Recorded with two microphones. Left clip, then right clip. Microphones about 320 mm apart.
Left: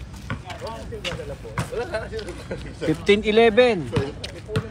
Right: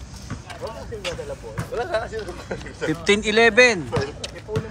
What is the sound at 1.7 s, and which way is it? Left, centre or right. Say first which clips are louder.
Speech: right 4 dB; right.